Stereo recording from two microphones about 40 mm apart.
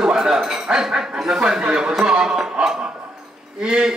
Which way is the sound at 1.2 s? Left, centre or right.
Centre.